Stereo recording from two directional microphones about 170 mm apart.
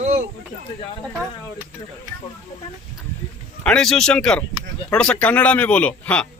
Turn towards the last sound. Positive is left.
turn(degrees=5)  # may be behind; listen again after turning